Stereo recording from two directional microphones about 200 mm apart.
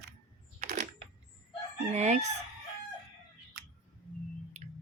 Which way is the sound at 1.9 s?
35° right (ahead or behind).